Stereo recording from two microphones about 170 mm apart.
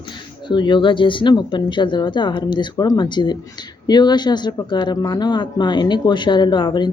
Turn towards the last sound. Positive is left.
turn(degrees=25)  # may be behind; listen again after turning